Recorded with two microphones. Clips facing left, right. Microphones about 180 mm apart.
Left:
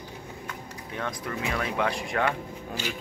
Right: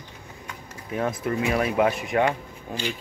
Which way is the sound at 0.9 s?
25° right (ahead or behind).